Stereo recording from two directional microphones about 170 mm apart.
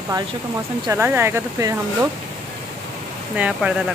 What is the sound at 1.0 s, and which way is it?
Speech, 10° right (ahead or behind).